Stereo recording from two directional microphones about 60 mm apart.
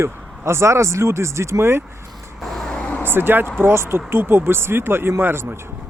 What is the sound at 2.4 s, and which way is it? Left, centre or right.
Vehicle, centre.